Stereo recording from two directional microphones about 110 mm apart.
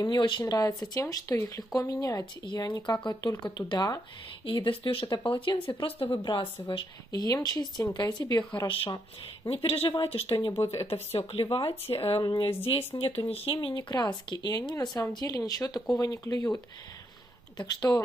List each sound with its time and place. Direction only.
0.0 s speech: 40° left (ahead or behind)
4.5 s speech: 50° left (ahead or behind)
7.1 s speech: 35° left (ahead or behind)
8.6 s speech: 55° left (ahead or behind)
10.5 s speech: 25° left (ahead or behind)
10.9 s speech: 65° left (ahead or behind)
12.2 s speech: 40° left (ahead or behind)
13.3 s speech: 65° left (ahead or behind)
13.6 s speech: 45° left (ahead or behind)
13.9 s speech: 35° left (ahead or behind)